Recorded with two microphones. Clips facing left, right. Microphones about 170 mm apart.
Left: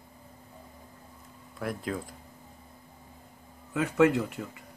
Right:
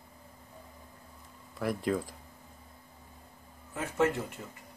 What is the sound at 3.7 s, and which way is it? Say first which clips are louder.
Speech: left 6 dB; 90° left.